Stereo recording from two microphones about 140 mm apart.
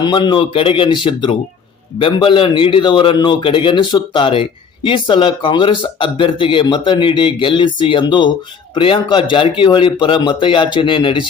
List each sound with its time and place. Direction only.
0.0 s a man's voice: 30° left (ahead or behind)